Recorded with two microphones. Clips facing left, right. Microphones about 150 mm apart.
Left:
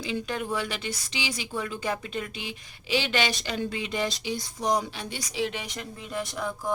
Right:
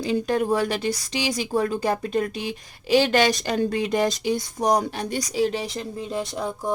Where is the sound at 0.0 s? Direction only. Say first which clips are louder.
Right 8 dB; 40° right (ahead or behind).